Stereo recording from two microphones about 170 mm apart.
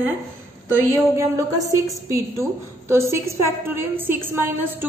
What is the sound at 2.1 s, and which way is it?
A woman's voice, 15° right (ahead or behind).